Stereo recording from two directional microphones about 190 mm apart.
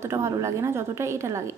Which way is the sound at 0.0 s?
15° right (ahead or behind).